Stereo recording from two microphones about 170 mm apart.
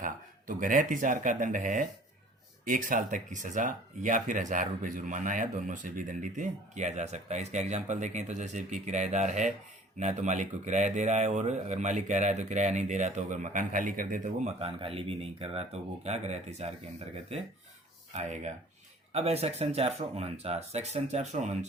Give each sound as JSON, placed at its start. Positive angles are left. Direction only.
{"t": 0.0, "sound": "speech", "side_deg": -50}
{"t": 14.6, "sound": "speech", "side_deg": -35}
{"t": 18.1, "sound": "speech", "side_deg": -40}